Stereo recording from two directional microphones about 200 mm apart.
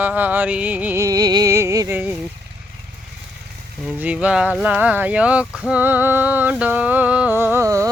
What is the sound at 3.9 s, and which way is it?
Speech, 5° right (ahead or behind).